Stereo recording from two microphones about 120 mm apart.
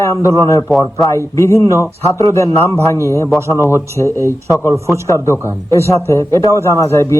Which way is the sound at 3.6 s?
25° left (ahead or behind).